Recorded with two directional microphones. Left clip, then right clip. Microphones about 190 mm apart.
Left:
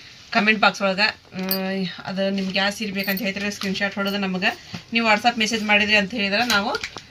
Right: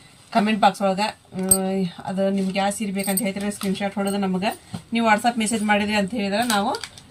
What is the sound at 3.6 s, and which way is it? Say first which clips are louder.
Speech: left 1 dB; 10° right (ahead or behind).